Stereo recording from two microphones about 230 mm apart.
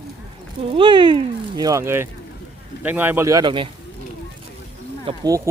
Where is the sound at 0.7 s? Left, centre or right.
Right.